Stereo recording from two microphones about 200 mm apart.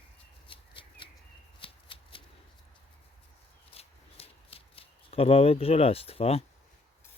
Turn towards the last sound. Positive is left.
turn(degrees=30)  # may be behind; listen again after turning